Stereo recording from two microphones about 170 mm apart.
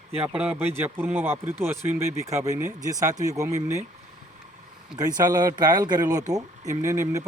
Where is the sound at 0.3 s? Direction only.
10° right (ahead or behind).